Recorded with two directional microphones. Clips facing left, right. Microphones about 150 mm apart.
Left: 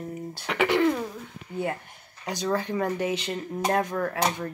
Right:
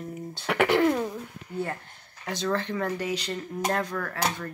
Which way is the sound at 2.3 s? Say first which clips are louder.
Left 1 dB; 15° left (ahead or behind).